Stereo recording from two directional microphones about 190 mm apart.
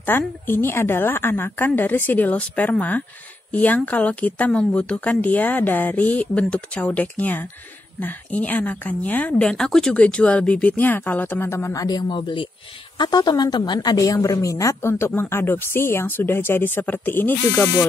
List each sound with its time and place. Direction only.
0.0 s speech: 10° left (ahead or behind)